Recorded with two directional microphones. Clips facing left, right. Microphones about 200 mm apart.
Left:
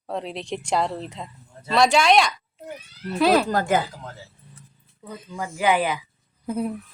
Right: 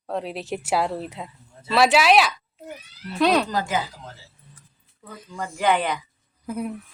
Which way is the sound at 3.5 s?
55° left (ahead or behind).